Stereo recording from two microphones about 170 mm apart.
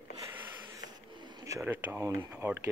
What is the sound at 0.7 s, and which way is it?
Speech, 25° right (ahead or behind).